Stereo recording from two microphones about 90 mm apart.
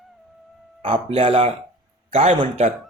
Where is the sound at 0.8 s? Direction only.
90° right.